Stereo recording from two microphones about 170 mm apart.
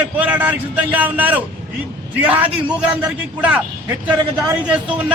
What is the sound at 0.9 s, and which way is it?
A man's voice, 10° right (ahead or behind).